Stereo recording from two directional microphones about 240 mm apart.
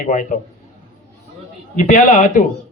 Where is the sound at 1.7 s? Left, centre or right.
Left.